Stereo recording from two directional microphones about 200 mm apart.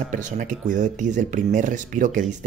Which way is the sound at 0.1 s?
40° right (ahead or behind).